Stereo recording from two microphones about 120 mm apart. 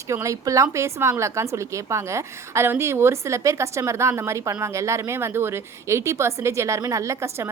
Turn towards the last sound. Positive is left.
turn(degrees=-20)  # may be behind; listen again after turning